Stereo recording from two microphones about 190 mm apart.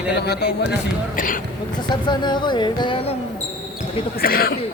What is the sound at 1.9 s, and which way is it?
Speech, 25° left (ahead or behind).